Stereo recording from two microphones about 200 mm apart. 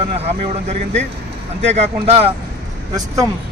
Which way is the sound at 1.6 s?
30° right (ahead or behind).